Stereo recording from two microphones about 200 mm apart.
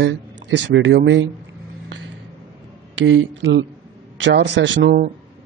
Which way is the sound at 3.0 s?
75° right (ahead or behind).